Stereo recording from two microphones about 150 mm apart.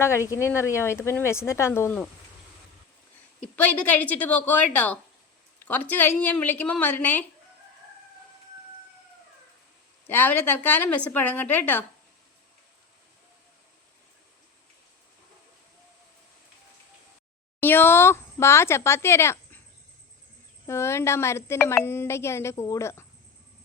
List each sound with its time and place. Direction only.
0.3 s speech: 20° left (ahead or behind)
3.4 s speech: 10° left (ahead or behind)
10.1 s speech: 15° left (ahead or behind)
17.6 s speech: 15° left (ahead or behind)
20.7 s speech: 20° left (ahead or behind)